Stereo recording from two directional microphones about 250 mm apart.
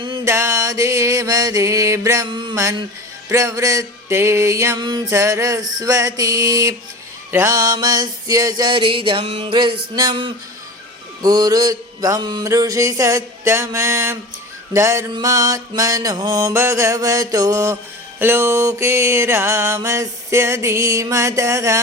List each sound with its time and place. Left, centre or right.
0.0 s music: centre